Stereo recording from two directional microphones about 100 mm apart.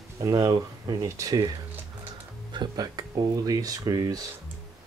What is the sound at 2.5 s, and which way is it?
Speech, 40° right (ahead or behind).